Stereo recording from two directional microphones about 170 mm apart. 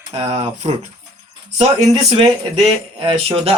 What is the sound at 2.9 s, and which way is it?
Speech, 35° right (ahead or behind).